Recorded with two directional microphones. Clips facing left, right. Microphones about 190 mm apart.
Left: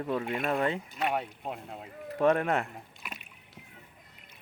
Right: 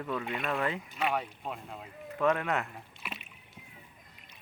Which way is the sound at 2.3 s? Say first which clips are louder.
Left 4 dB; 45° left (ahead or behind).